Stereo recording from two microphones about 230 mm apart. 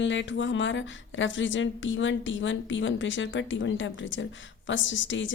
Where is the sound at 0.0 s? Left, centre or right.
Left.